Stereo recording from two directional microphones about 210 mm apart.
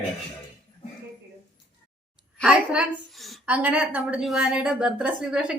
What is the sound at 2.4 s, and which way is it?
A woman's voice, centre (ahead or behind).